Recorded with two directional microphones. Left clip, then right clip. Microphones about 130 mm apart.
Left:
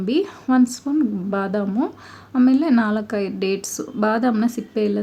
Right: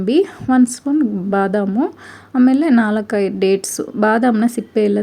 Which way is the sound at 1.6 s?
25° right (ahead or behind).